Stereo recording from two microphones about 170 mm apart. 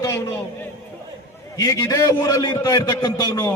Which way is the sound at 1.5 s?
20° left (ahead or behind).